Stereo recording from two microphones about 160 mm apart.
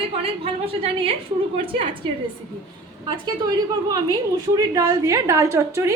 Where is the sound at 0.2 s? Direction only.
35° right (ahead or behind).